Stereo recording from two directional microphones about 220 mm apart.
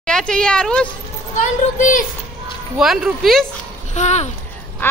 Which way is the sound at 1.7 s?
35° left (ahead or behind).